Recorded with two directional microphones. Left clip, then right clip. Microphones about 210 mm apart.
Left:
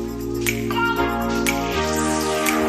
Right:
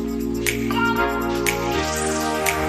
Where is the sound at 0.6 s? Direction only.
Centre (ahead or behind).